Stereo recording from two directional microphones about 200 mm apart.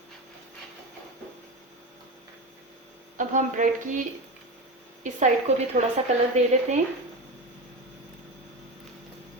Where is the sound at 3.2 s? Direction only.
40° right (ahead or behind).